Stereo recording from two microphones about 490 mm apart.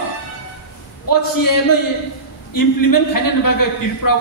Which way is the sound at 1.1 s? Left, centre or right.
Left.